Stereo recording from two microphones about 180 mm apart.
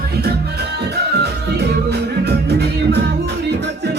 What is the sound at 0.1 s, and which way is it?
Music, 60° right (ahead or behind).